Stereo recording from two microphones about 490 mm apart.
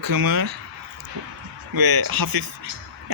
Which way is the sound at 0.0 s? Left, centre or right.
Right.